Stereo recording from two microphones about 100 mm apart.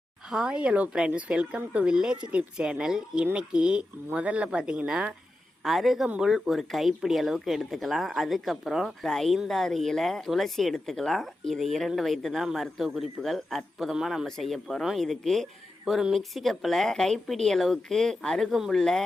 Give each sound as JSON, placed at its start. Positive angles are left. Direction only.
{"t": 0.3, "sound": "speech", "side_deg": -5}